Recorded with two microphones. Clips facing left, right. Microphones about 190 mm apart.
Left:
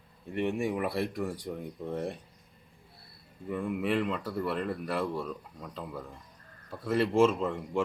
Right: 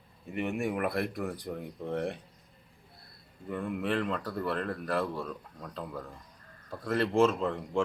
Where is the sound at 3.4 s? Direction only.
Centre (ahead or behind).